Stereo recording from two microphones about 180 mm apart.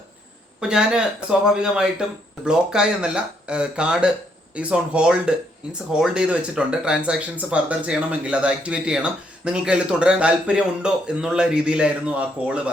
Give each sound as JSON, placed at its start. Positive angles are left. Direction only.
{"t": 0.6, "sound": "speech", "side_deg": -5}